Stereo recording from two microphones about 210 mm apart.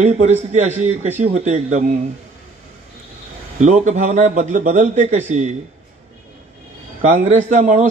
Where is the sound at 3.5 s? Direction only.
35° right (ahead or behind).